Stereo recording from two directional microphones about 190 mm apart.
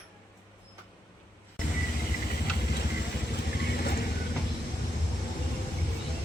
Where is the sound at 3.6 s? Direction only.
55° left (ahead or behind).